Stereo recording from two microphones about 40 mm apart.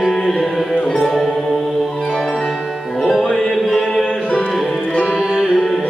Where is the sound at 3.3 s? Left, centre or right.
Centre.